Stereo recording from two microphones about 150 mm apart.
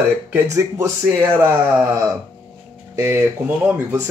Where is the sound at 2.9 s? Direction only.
15° right (ahead or behind).